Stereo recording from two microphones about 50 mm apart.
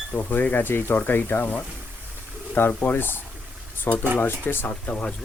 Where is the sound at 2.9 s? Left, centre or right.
Left.